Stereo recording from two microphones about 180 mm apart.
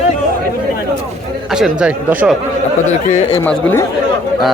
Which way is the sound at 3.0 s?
35° left (ahead or behind).